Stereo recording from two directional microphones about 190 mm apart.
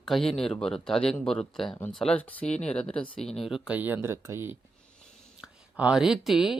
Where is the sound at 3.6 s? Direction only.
10° right (ahead or behind).